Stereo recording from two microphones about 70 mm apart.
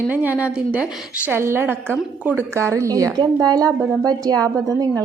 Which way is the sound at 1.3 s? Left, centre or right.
Right.